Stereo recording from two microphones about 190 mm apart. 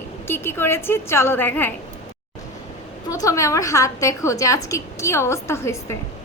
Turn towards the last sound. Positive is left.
turn(degrees=15)  # may be behind; listen again after turning